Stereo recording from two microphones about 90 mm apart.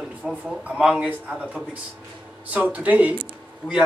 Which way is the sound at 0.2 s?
10° right (ahead or behind).